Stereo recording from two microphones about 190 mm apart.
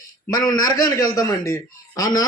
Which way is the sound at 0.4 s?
20° left (ahead or behind).